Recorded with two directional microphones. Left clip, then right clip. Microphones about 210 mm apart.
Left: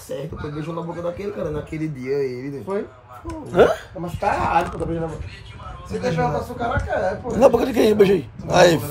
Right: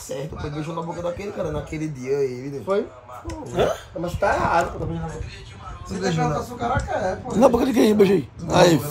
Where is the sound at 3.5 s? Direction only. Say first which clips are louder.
Left 6 dB; 30° left (ahead or behind).